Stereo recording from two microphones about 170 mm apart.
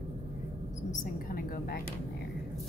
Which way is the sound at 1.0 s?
55° left (ahead or behind).